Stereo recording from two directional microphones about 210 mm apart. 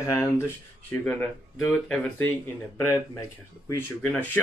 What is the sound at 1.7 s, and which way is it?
Speech, 5° left (ahead or behind).